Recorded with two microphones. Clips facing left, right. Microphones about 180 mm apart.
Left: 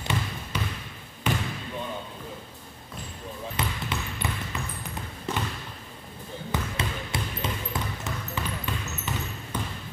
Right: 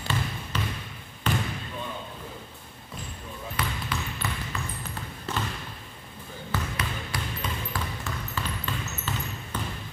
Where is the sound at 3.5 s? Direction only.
20° left (ahead or behind).